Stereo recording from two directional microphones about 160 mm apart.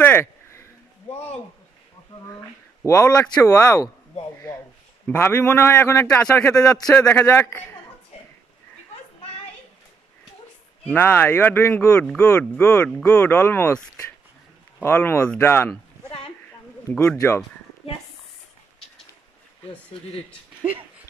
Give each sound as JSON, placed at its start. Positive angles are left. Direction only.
{"t": 0.0, "sound": "a sound", "side_deg": 15}
{"t": 3.0, "sound": "speech", "side_deg": 20}
{"t": 5.0, "sound": "speech", "side_deg": 10}
{"t": 10.9, "sound": "speech", "side_deg": 10}
{"t": 16.8, "sound": "speech", "side_deg": 10}